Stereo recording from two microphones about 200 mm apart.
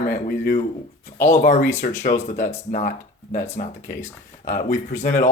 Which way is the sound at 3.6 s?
50° left (ahead or behind).